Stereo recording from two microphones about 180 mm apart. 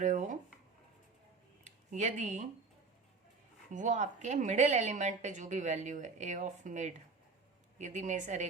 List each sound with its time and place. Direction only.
0.0 s speech: 45° right (ahead or behind)
1.6 s speech: 40° right (ahead or behind)
3.7 s a woman's voice: 45° right (ahead or behind)